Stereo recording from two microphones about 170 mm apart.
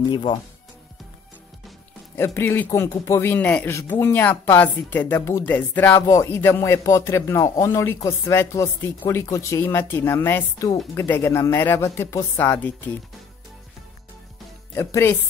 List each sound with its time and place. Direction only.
0.1 s speech: 25° left (ahead or behind)
2.1 s speech: 15° left (ahead or behind)
14.8 s speech: 15° left (ahead or behind)